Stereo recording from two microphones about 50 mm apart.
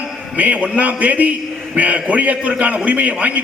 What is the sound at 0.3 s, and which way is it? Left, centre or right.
A man's voice, right.